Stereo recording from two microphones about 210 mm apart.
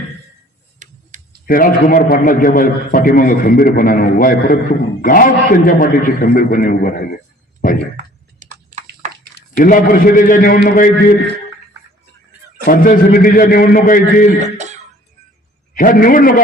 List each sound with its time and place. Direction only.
0.8 s typing: 35° right (ahead or behind)
1.5 s a man's voice: 40° left (ahead or behind)
8.4 s a sound: 35° right (ahead or behind)
9.6 s a man's voice: 40° left (ahead or behind)
12.6 s a man's voice: 40° left (ahead or behind)
15.7 s a man's voice: 40° left (ahead or behind)